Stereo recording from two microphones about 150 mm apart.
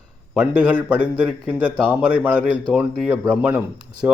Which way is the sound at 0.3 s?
10° right (ahead or behind).